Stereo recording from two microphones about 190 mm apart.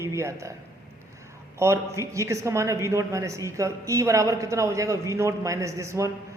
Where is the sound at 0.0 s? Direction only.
15° right (ahead or behind).